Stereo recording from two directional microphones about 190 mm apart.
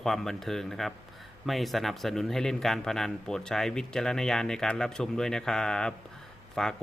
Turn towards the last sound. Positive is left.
turn(degrees=0)  # may be behind; listen again after turning